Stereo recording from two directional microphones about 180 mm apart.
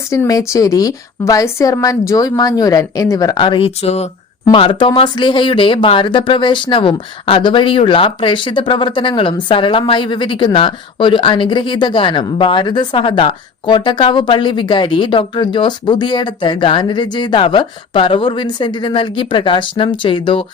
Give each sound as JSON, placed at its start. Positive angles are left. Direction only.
{"t": 0.1, "sound": "speech", "side_deg": 20}